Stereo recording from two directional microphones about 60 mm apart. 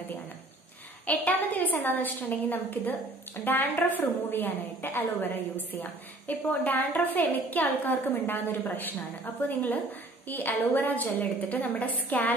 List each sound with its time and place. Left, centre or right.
1.0 s a woman's voice: left